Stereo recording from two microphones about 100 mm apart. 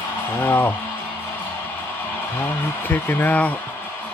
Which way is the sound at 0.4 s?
20° left (ahead or behind).